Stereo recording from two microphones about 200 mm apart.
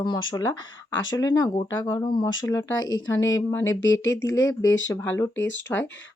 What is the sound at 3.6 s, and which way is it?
Speech, 70° left (ahead or behind).